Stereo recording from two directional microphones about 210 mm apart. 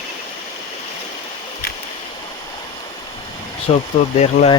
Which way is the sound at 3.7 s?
30° left (ahead or behind).